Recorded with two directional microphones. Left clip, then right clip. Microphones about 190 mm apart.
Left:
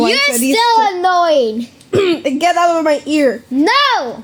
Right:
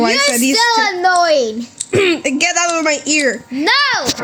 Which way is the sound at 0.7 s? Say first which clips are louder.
Left 1 dB; 15° left (ahead or behind).